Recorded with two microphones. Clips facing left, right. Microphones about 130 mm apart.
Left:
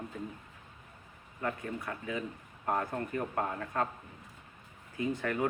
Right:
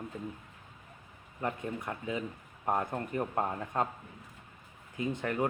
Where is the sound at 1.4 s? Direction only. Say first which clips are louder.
Right 1 dB; 20° right (ahead or behind).